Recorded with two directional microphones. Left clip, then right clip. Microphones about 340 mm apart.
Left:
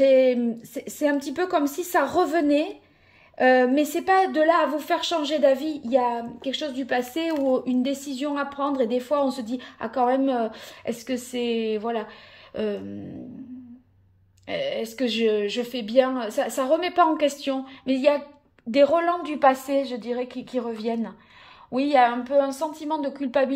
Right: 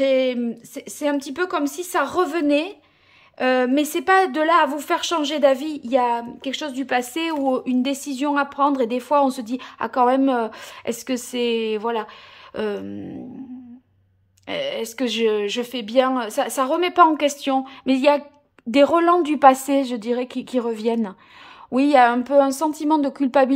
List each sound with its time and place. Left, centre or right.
0.0 s speech: centre
14.5 s speech: centre